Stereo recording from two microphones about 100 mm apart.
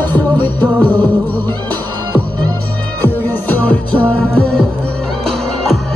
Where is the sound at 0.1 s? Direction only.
15° left (ahead or behind).